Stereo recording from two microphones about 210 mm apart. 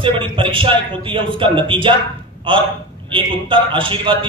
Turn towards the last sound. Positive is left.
turn(degrees=-25)  # may be behind; listen again after turning